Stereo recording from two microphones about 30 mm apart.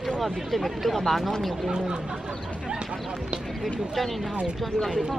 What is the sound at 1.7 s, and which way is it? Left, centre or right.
Speech, right.